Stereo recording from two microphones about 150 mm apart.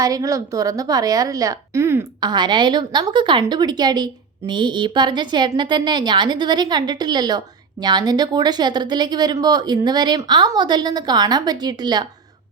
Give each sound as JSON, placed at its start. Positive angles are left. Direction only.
{"t": 0.0, "sound": "a woman's voice", "side_deg": -20}
{"t": 2.3, "sound": "a woman's voice", "side_deg": -30}